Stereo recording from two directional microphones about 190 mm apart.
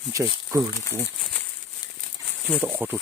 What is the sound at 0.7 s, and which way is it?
Speech, 15° left (ahead or behind).